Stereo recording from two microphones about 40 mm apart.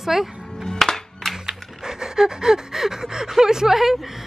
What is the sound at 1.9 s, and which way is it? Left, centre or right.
Speech, centre.